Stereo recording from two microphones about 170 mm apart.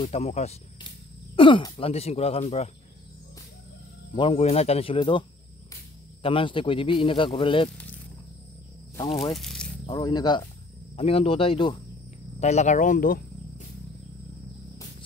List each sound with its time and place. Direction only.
0.0 s speech: 40° left (ahead or behind)
4.1 s speech: 30° left (ahead or behind)
6.2 s speech: 30° left (ahead or behind)
9.3 s speech: centre (ahead or behind)
9.8 s speech: 25° left (ahead or behind)
12.4 s speech: 40° left (ahead or behind)